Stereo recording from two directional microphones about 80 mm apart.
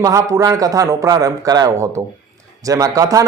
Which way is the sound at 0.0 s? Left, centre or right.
Right.